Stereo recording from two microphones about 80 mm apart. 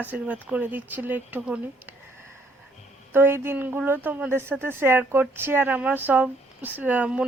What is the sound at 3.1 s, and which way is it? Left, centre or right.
Speech, right.